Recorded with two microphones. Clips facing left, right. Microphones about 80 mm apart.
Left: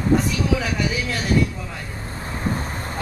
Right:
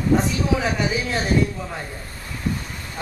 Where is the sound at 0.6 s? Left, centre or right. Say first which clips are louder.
Right 1 dB; right.